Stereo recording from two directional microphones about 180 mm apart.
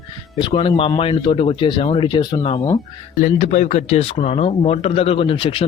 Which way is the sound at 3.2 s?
40° left (ahead or behind).